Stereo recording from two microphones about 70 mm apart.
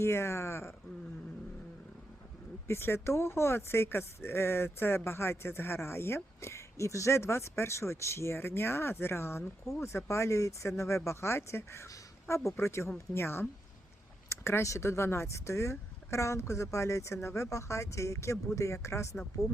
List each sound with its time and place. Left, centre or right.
0.0 s speech: left
2.6 s speech: left